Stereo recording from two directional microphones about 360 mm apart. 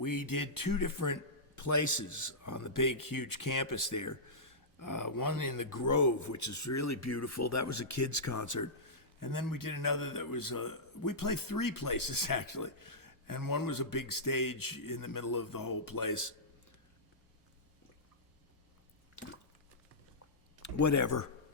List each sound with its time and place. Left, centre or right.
0.0 s a man's voice: left
20.6 s speech: left